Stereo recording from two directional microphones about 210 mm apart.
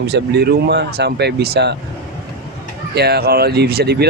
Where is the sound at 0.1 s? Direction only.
50° right (ahead or behind).